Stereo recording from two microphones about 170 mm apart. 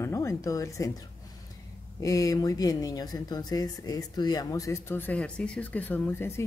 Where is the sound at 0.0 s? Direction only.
15° left (ahead or behind).